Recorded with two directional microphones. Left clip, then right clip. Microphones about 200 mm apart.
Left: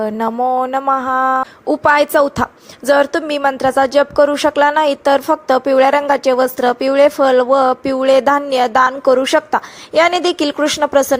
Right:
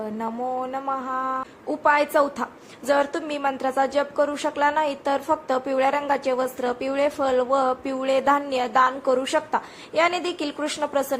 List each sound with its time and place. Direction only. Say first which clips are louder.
0.0 s speech: left 12 dB; 35° left (ahead or behind)